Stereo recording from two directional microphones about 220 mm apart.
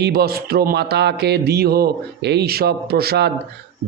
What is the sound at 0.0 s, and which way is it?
Speech, 45° right (ahead or behind).